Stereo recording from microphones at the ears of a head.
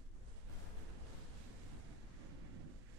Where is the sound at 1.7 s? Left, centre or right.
Right.